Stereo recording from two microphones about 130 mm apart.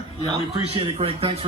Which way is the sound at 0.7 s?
45° right (ahead or behind).